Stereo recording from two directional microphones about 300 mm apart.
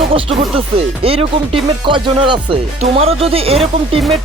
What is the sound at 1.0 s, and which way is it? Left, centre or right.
Speech, centre.